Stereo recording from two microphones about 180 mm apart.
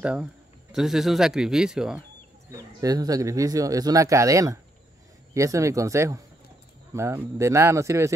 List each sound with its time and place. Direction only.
0.0 s speech: 5° right (ahead or behind)
2.5 s speech: 20° right (ahead or behind)